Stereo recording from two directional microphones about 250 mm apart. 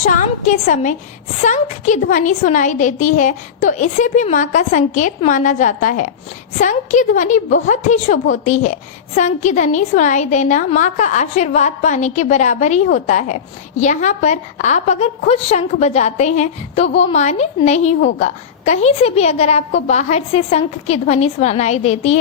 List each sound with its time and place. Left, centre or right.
0.0 s a woman's voice: left